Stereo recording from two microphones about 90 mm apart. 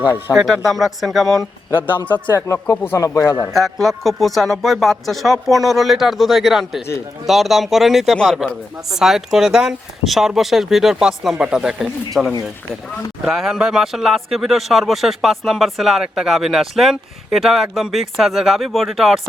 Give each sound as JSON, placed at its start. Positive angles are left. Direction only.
{"t": 0.3, "sound": "speech", "side_deg": 0}
{"t": 2.3, "sound": "speech", "side_deg": 35}
{"t": 3.4, "sound": "speech", "side_deg": 0}